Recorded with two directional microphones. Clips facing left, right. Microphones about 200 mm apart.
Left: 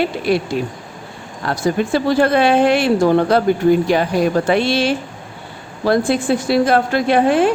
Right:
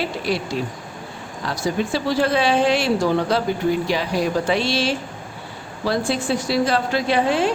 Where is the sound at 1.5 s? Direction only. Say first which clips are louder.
Left 5 dB; 55° left (ahead or behind).